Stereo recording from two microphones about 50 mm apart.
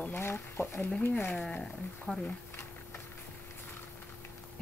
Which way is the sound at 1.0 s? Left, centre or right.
Left.